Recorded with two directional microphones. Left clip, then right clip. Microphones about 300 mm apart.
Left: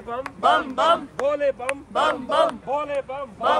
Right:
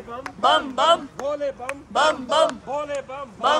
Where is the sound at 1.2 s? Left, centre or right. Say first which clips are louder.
Left 4 dB; left.